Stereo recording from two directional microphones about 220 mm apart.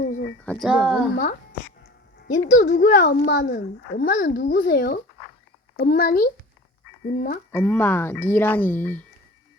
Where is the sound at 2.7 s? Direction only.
35° left (ahead or behind).